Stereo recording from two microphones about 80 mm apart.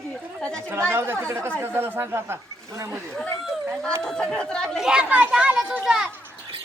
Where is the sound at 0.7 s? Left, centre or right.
Right.